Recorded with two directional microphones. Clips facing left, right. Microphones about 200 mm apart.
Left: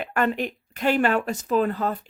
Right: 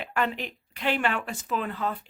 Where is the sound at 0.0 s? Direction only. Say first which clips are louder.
Left 5 dB; 50° left (ahead or behind).